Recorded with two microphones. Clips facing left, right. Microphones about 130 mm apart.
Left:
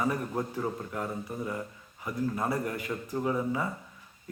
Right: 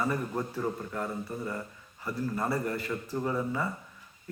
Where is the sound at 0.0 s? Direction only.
10° left (ahead or behind).